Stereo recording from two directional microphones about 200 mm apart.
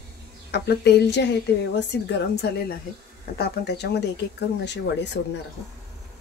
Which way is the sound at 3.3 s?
55° left (ahead or behind).